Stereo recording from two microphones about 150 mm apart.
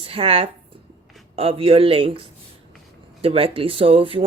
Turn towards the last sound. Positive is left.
turn(degrees=-40)  # may be behind; listen again after turning